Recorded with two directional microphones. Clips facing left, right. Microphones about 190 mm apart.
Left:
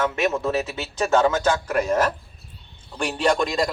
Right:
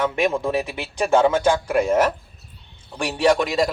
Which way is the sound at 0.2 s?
15° right (ahead or behind).